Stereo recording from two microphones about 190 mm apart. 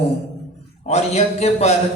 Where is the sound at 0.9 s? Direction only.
35° left (ahead or behind).